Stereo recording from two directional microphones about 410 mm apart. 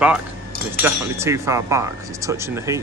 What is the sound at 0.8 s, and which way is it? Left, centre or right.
Speech, centre.